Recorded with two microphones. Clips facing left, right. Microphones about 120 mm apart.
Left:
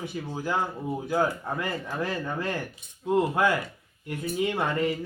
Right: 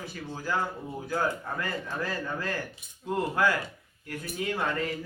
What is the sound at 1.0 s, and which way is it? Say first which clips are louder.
Speech: left 3 dB; 15° left (ahead or behind).